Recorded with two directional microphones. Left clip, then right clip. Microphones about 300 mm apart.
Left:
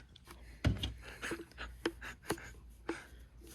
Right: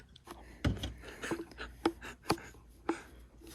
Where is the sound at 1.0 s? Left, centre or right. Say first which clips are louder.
Right 3 dB; centre.